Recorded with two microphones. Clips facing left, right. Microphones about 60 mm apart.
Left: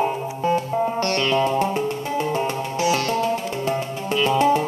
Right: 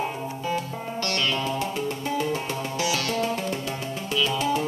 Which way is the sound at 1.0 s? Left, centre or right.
Left.